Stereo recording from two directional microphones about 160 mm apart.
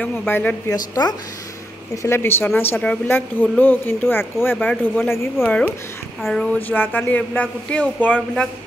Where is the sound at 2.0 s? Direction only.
15° left (ahead or behind).